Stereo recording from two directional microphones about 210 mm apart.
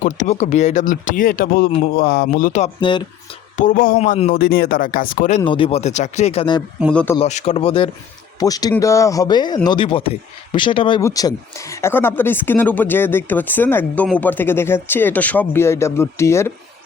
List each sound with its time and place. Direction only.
0.0 s speech: 35° left (ahead or behind)
5.4 s speech: 25° left (ahead or behind)
6.9 s speech: 10° left (ahead or behind)
7.2 s speech: 30° left (ahead or behind); by 16.5 s 15° left (ahead or behind)